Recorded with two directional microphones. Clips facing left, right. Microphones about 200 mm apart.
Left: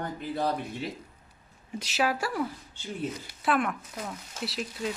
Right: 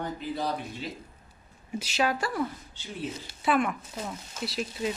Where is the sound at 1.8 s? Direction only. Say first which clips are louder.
Even; 5° left (ahead or behind).